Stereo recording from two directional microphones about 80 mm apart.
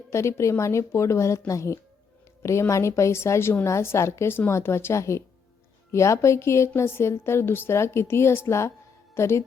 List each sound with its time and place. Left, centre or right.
0.1 s a woman's voice: left